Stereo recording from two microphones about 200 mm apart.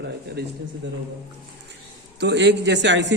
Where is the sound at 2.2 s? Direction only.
60° right (ahead or behind).